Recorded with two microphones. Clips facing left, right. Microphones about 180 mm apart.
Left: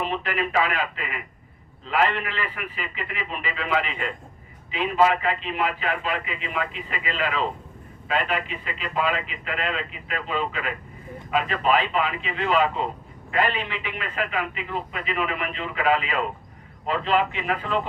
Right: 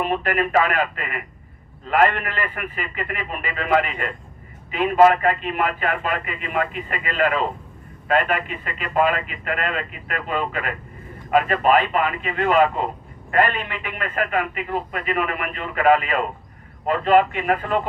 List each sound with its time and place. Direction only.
0.0 s speech: 50° right (ahead or behind)